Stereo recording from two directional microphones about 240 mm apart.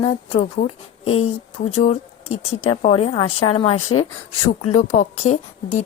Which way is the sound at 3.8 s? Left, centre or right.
Left.